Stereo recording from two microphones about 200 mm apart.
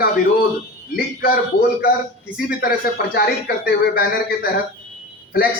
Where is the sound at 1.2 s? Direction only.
50° left (ahead or behind).